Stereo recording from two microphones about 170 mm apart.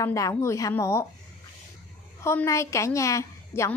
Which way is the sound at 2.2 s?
15° left (ahead or behind).